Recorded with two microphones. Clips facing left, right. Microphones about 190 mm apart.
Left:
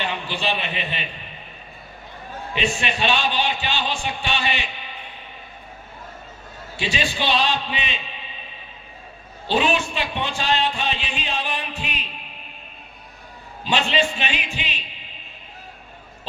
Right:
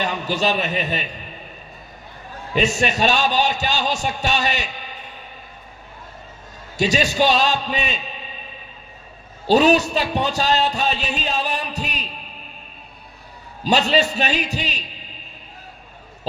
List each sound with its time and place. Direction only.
0.0 s a man's voice: 40° right (ahead or behind)
2.6 s speech: 40° right (ahead or behind)
6.7 s a man's voice: 40° right (ahead or behind)
9.5 s speech: 40° right (ahead or behind)
13.7 s speech: 40° right (ahead or behind)